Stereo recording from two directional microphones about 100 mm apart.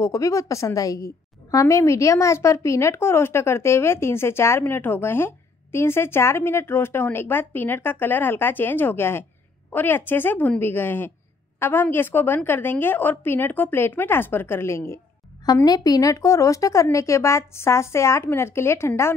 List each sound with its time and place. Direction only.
0.0 s a woman's voice: 30° left (ahead or behind)
15.4 s a woman's voice: 40° left (ahead or behind)